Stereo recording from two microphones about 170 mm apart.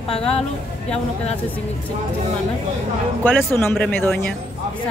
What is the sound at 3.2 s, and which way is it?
Speech, 10° left (ahead or behind).